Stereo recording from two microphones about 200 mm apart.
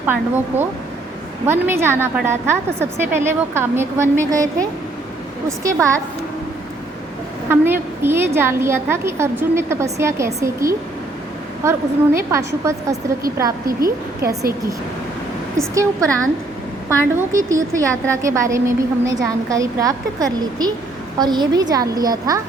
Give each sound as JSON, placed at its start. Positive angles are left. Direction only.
{"t": 0.0, "sound": "a woman's voice", "side_deg": -10}
{"t": 5.5, "sound": "a woman's voice", "side_deg": -15}
{"t": 7.4, "sound": "a woman's voice", "side_deg": -10}
{"t": 15.5, "sound": "a woman's voice", "side_deg": -15}